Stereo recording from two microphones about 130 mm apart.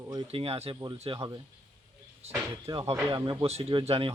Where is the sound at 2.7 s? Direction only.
45° right (ahead or behind).